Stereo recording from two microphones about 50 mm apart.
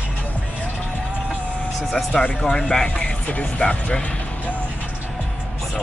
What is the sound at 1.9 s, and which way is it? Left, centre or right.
Speech, left.